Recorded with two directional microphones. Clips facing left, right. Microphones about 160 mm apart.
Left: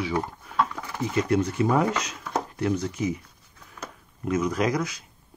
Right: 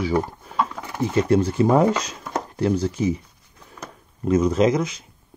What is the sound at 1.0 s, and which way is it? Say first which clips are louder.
Speech: right 5 dB; 30° right (ahead or behind).